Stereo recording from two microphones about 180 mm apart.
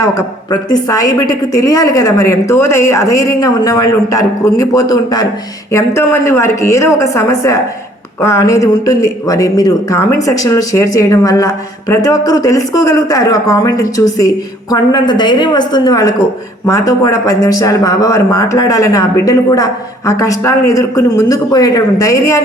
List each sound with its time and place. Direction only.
0.0 s a man's voice: 20° left (ahead or behind)